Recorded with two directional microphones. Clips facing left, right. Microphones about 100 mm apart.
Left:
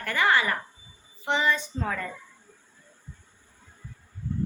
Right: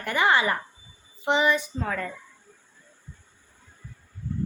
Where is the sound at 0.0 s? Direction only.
20° right (ahead or behind); by 2.0 s centre (ahead or behind).